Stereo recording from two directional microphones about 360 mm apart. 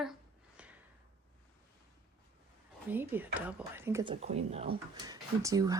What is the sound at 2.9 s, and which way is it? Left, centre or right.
Speech, centre.